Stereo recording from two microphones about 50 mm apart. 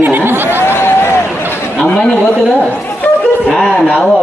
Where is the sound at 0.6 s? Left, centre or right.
Left.